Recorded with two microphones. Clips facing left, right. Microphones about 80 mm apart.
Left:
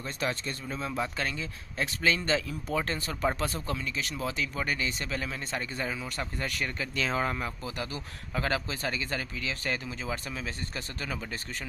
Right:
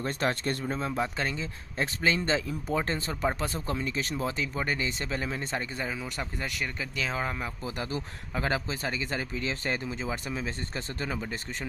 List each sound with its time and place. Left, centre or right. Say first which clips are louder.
0.0 s speech: right 4 dB; right
0.7 s speech: right 2 dB; right
4.4 s speech: right 1 dB; right; by 7.3 s centre
7.6 s speech: right 3 dB; right